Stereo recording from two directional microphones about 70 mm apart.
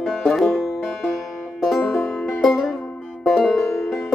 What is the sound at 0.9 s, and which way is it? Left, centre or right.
Music, centre.